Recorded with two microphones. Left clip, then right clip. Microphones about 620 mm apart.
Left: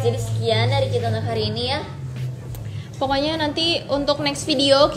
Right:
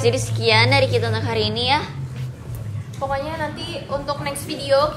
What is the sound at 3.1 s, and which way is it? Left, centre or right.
A woman's voice, left.